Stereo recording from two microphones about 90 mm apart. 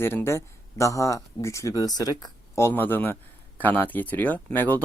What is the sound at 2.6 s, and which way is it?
Speech, 25° left (ahead or behind).